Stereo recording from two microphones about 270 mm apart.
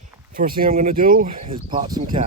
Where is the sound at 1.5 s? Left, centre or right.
Centre.